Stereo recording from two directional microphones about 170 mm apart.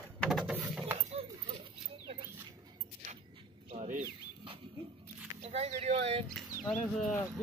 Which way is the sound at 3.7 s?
45° right (ahead or behind).